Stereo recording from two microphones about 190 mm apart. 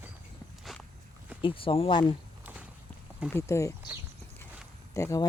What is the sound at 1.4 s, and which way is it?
Speech, 30° left (ahead or behind).